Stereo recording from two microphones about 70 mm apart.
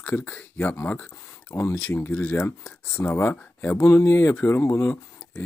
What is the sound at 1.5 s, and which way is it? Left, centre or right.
Speech, left.